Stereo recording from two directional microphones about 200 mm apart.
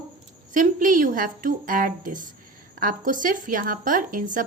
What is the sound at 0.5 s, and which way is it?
A woman's voice, 40° right (ahead or behind).